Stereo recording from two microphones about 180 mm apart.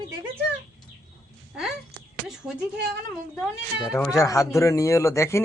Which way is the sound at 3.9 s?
15° left (ahead or behind).